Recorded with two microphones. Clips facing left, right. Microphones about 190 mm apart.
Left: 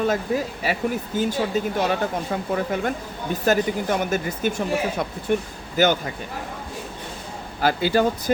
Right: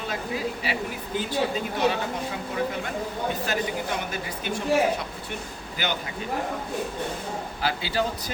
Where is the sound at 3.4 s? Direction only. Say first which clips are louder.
Left 7 dB; 50° left (ahead or behind).